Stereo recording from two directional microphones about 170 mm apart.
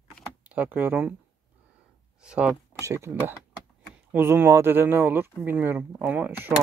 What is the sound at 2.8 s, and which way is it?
Speech, 15° right (ahead or behind).